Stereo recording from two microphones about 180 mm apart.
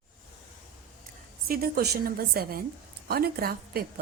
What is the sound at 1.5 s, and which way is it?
A woman's voice, 60° right (ahead or behind).